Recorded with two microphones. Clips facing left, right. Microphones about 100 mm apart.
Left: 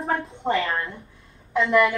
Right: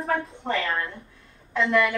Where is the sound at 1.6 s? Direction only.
30° left (ahead or behind).